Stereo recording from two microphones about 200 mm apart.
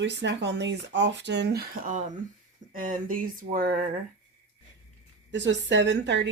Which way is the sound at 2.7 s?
40° right (ahead or behind).